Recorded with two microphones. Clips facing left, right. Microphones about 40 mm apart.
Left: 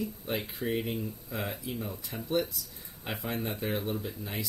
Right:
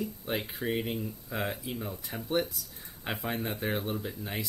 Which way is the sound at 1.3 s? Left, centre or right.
Right.